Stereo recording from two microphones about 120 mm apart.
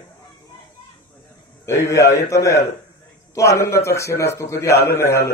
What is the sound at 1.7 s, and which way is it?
Speech, 25° left (ahead or behind).